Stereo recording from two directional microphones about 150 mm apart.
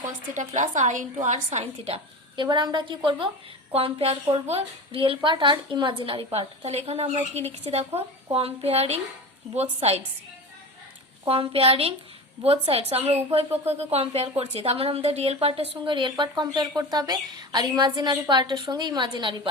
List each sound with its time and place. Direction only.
0.3 s a woman's voice: 55° right (ahead or behind)
11.3 s a woman's voice: 40° right (ahead or behind)